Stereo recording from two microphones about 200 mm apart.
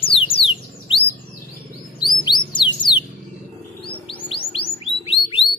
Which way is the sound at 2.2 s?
20° left (ahead or behind).